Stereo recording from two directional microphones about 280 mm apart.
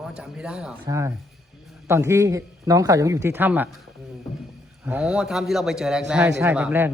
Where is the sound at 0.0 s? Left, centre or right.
Centre.